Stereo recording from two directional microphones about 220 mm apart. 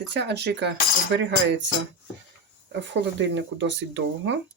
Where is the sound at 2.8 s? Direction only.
55° right (ahead or behind).